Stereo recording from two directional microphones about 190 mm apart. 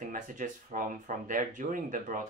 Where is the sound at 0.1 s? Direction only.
45° right (ahead or behind).